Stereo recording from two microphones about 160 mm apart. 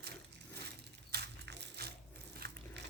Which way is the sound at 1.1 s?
90° right.